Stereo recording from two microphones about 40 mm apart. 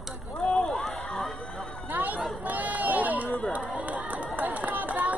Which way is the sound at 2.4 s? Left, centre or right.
Right.